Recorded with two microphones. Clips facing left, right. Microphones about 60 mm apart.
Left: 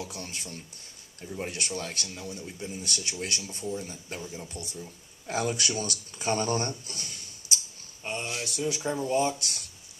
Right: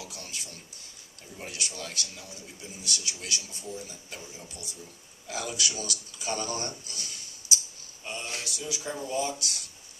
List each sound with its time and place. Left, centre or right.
0.0 s speech: left